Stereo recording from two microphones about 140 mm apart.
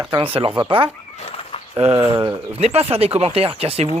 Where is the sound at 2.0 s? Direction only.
45° right (ahead or behind).